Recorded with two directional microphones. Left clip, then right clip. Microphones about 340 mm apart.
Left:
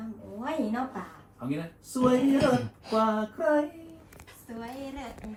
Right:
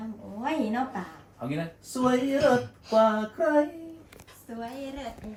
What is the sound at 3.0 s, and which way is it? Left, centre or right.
A woman's voice, centre.